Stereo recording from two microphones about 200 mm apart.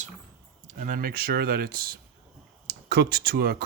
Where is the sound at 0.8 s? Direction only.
45° right (ahead or behind).